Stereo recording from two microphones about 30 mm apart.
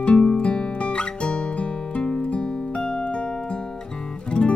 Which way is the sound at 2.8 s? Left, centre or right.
Centre.